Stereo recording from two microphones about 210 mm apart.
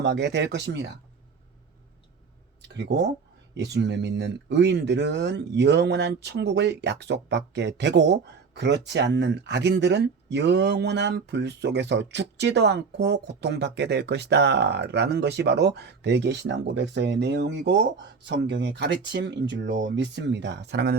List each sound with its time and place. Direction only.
0.0 s speech: 55° right (ahead or behind)
2.6 s a sound: 55° right (ahead or behind)
3.5 s speech: 55° right (ahead or behind)